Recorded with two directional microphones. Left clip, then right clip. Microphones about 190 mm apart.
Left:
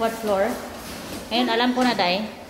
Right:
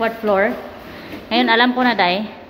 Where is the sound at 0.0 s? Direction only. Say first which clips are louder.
Right 5 dB; 30° right (ahead or behind).